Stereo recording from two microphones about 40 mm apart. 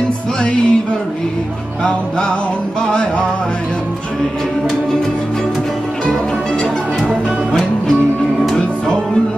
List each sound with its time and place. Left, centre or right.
0.4 s music: left
1.8 s music: left
8.5 s music: centre